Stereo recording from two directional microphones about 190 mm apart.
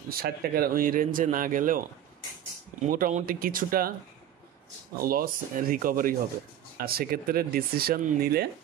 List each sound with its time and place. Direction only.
0.1 s speech: 50° right (ahead or behind)
4.9 s speech: 50° right (ahead or behind)